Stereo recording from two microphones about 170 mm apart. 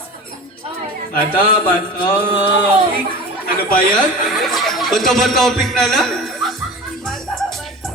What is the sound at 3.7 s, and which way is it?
Speech, 55° left (ahead or behind).